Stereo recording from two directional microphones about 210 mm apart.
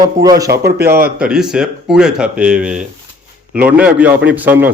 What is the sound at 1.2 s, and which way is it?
A man's voice, 5° right (ahead or behind).